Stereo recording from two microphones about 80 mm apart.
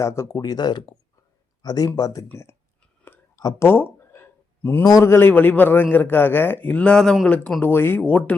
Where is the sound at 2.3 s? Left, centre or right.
Left.